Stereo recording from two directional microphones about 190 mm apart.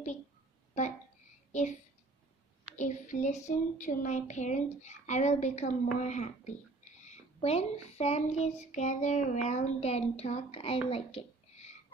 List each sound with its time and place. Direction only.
2.7 s child singing: 40° left (ahead or behind)